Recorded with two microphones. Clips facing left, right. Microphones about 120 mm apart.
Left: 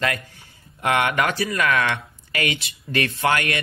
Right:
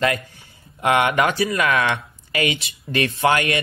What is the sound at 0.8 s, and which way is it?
Speech, 20° right (ahead or behind).